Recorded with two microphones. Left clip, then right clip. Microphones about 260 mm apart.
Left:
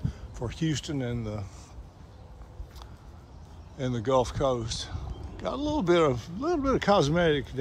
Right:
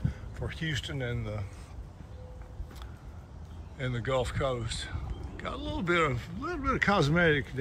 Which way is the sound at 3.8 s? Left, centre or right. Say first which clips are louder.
Left 5 dB; centre.